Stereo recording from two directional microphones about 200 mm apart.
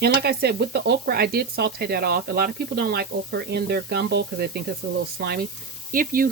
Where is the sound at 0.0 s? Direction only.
50° right (ahead or behind).